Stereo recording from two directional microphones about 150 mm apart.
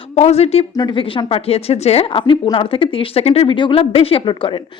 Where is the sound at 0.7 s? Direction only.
30° left (ahead or behind).